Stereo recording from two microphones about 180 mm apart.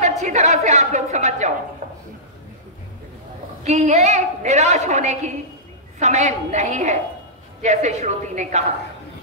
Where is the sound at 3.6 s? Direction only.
40° right (ahead or behind).